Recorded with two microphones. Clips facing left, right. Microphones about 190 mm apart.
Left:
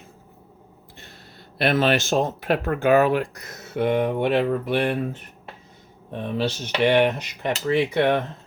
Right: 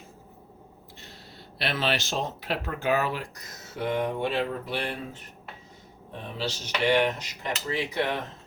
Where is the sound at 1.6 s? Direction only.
50° left (ahead or behind).